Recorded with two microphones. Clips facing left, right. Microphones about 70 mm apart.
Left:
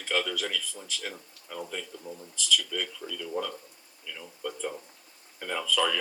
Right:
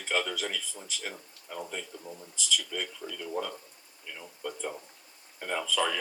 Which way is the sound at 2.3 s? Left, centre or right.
Centre.